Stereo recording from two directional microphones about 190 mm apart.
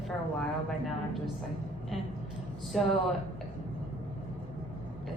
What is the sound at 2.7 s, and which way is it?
Speech, centre (ahead or behind).